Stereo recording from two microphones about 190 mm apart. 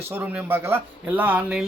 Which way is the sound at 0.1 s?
10° right (ahead or behind).